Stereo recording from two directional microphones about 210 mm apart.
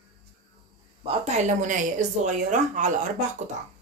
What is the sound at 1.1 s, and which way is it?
A woman's voice, 30° right (ahead or behind).